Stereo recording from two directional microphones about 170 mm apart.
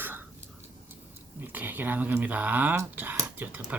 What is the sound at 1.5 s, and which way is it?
Speech, 10° right (ahead or behind).